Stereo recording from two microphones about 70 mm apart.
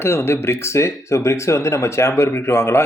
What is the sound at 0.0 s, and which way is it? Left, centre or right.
Speech, left.